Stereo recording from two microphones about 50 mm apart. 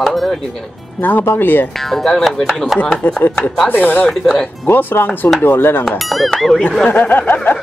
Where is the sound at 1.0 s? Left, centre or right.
Left.